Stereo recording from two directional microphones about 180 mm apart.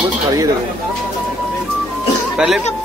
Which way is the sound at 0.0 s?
20° right (ahead or behind).